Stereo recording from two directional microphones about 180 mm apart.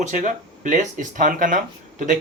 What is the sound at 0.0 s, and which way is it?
Speech, 45° right (ahead or behind).